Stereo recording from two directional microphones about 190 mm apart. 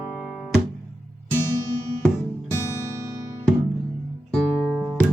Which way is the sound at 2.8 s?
15° right (ahead or behind).